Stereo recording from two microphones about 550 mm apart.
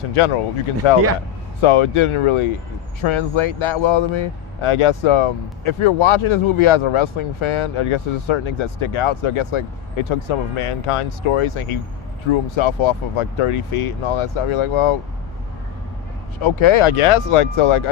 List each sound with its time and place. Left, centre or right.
0.8 s speech: left
16.4 s speech: left